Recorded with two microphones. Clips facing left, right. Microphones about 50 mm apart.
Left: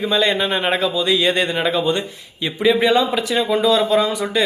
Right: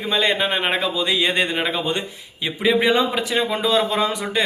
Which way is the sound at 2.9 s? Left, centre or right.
Right.